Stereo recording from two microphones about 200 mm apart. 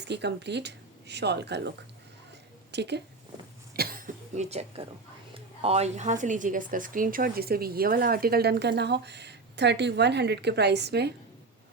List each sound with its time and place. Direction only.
0.1 s speech: 60° right (ahead or behind)
2.7 s speech: 60° right (ahead or behind)
3.8 s a woman's voice: 45° right (ahead or behind)